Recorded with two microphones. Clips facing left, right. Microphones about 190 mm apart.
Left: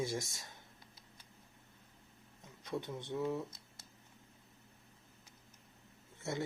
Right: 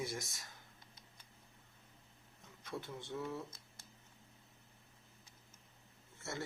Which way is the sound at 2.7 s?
20° left (ahead or behind).